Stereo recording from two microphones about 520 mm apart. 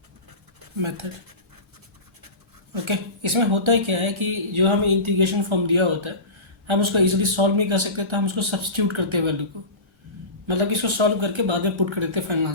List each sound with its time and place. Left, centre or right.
0.8 s speech: right
2.8 s speech: right